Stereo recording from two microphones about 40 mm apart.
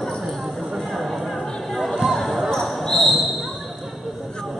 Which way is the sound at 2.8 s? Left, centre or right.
Centre.